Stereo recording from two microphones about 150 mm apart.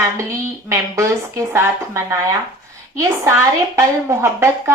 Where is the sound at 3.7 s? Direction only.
20° right (ahead or behind).